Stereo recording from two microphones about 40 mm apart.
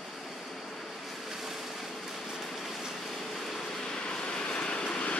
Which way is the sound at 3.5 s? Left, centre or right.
Centre.